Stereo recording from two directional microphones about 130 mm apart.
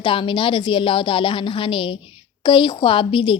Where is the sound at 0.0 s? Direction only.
40° left (ahead or behind).